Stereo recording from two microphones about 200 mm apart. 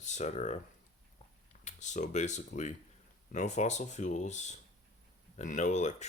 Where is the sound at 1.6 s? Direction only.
35° left (ahead or behind).